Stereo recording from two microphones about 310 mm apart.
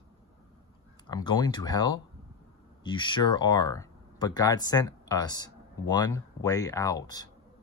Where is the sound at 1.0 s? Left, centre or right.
Centre.